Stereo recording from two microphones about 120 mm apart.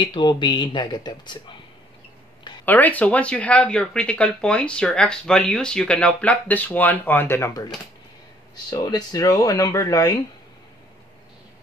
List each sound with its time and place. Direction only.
0.0 s speech: 40° left (ahead or behind)
2.6 s speech: 15° left (ahead or behind)